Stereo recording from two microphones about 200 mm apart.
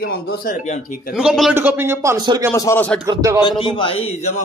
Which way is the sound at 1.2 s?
Centre (ahead or behind).